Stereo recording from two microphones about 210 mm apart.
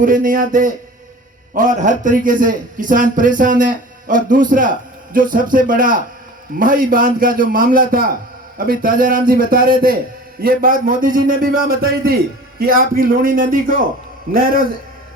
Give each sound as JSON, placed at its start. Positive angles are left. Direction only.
{"t": 0.0, "sound": "a man's voice", "side_deg": -40}